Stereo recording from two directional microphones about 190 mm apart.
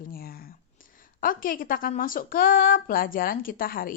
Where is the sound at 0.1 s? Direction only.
50° left (ahead or behind).